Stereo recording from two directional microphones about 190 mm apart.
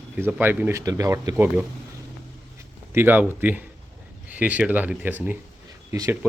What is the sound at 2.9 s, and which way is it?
A man's voice, 10° right (ahead or behind).